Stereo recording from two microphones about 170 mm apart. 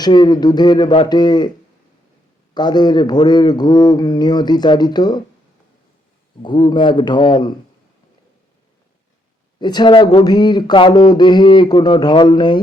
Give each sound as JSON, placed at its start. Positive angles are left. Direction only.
{"t": 0.0, "sound": "a man's voice", "side_deg": 25}
{"t": 2.6, "sound": "a man's voice", "side_deg": 25}
{"t": 6.4, "sound": "a man's voice", "side_deg": 30}
{"t": 9.6, "sound": "a man's voice", "side_deg": 25}